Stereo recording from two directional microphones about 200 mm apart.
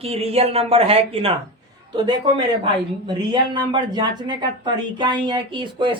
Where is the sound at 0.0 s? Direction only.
30° right (ahead or behind).